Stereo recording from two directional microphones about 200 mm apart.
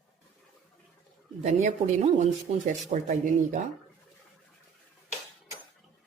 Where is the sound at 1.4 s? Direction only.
35° right (ahead or behind).